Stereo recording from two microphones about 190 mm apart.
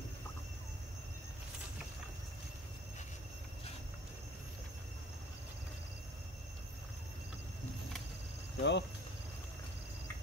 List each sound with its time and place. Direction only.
8.5 s speech: 65° left (ahead or behind)